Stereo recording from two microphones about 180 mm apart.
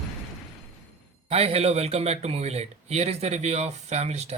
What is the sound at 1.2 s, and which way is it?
A man's voice, 35° right (ahead or behind).